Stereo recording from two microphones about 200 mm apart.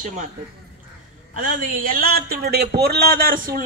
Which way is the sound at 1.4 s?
45° right (ahead or behind).